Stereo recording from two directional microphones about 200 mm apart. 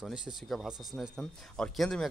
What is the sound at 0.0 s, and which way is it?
Speech, 5° right (ahead or behind).